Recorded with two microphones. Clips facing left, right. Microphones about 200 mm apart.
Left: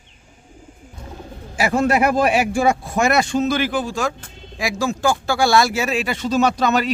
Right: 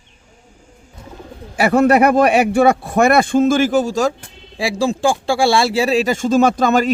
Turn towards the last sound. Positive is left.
turn(degrees=-50)  # may be behind; listen again after turning